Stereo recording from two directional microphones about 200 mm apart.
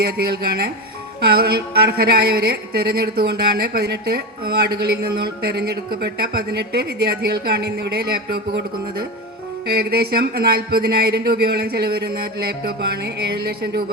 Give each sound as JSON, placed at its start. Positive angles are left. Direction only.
{"t": 0.0, "sound": "a woman's voice", "side_deg": -50}